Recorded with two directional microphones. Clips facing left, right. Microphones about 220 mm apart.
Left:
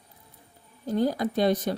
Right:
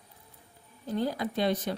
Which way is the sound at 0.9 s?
40° left (ahead or behind).